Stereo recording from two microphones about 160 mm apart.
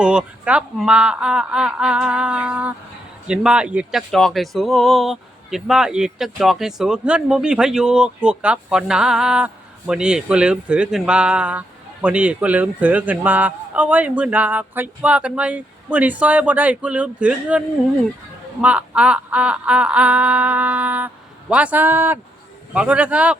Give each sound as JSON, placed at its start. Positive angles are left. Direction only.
{"t": 0.0, "sound": "speech", "side_deg": -5}
{"t": 18.6, "sound": "speech", "side_deg": -10}